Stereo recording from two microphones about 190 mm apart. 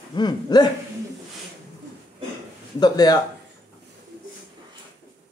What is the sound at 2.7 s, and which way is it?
Speech, 20° left (ahead or behind).